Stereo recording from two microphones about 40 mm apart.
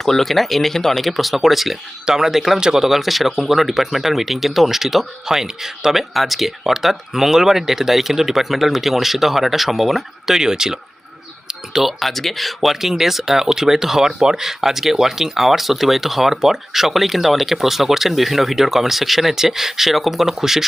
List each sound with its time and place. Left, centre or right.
0.0 s speech: centre
10.2 s speech: centre